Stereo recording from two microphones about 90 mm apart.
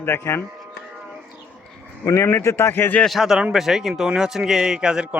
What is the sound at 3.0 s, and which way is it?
A man's voice, centre (ahead or behind).